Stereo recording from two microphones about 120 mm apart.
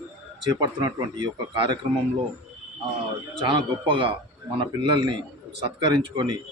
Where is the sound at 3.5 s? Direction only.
45° right (ahead or behind).